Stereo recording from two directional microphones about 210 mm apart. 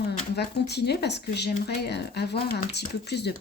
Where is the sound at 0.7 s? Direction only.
50° left (ahead or behind).